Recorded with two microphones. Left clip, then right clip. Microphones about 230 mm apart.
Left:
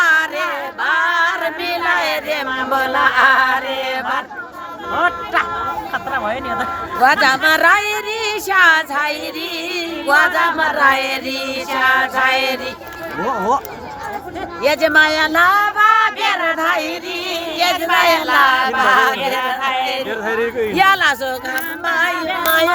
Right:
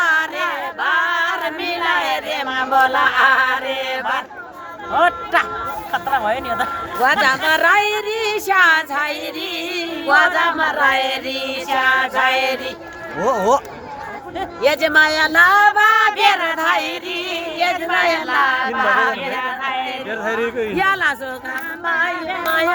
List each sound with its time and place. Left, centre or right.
0.0 s a sound: centre
2.7 s speech: centre
3.8 s chant: centre
4.9 s speech: centre
7.0 s speech: centre
13.2 s speech: right
14.6 s speech: centre
17.6 s speech: left
20.1 s speech: centre
20.7 s a sound: left